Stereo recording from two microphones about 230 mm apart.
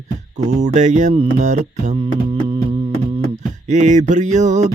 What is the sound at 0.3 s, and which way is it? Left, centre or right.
Mantra, right.